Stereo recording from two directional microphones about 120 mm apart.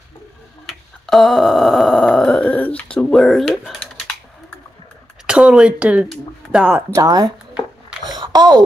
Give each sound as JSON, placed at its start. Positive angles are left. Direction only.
{"t": 0.7, "sound": "groan", "side_deg": 0}
{"t": 5.2, "sound": "speech", "side_deg": -5}
{"t": 7.0, "sound": "speech", "side_deg": -30}
{"t": 8.1, "sound": "a sound", "side_deg": -35}